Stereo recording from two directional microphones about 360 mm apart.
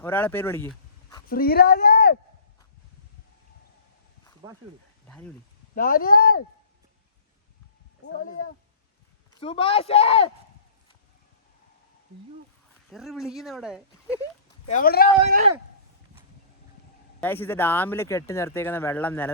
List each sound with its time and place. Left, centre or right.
0.0 s speech: centre
1.3 s speech: left
4.4 s speech: centre
5.0 s speech: centre
5.7 s speech: left
9.4 s speech: centre
12.9 s speech: centre
14.7 s speech: left
15.3 s speech: right
17.2 s speech: centre